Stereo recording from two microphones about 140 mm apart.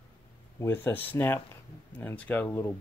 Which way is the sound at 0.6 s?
15° left (ahead or behind).